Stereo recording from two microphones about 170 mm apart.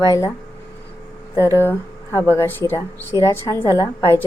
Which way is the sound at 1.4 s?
15° left (ahead or behind).